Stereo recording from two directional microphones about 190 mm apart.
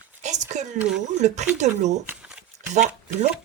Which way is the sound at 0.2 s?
40° right (ahead or behind).